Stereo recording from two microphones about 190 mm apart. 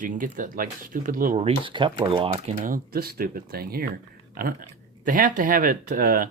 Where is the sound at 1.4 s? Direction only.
30° right (ahead or behind).